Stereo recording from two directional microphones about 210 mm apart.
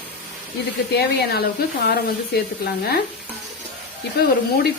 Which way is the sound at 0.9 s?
50° left (ahead or behind).